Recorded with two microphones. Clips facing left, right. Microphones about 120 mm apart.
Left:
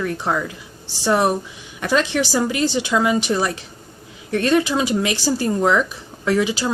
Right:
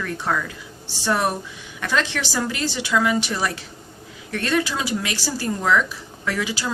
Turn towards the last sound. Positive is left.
turn(degrees=20)  # may be behind; listen again after turning